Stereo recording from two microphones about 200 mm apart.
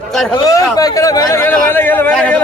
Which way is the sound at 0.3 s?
15° left (ahead or behind).